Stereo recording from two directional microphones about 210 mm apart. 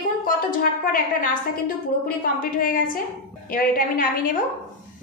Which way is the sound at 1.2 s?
40° left (ahead or behind).